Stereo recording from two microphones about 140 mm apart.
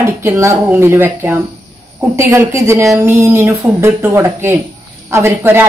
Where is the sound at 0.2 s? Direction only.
20° right (ahead or behind).